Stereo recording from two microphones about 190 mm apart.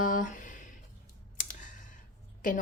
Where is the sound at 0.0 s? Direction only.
45° left (ahead or behind).